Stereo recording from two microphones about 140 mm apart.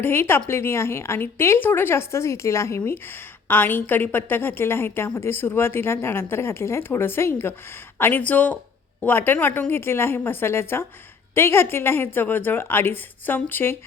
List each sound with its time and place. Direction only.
0.0 s speech: 15° left (ahead or behind)